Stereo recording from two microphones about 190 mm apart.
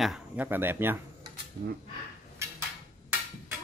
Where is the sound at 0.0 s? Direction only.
5° right (ahead or behind).